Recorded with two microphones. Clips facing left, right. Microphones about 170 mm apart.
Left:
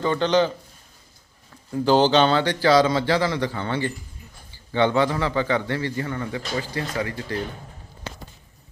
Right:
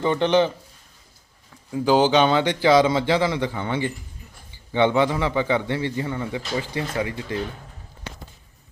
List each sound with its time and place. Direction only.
0.0 s a man's voice: 20° right (ahead or behind)
1.7 s a man's voice: 10° right (ahead or behind)